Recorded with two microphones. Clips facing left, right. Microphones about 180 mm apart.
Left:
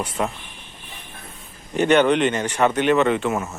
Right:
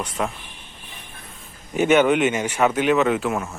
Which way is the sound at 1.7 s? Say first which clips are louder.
Even; 5° right (ahead or behind).